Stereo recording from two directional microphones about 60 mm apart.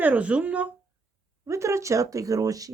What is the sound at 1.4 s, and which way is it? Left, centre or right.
Speech, right.